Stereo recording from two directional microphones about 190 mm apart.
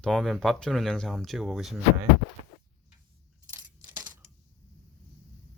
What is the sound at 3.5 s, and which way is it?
Coin, 10° right (ahead or behind).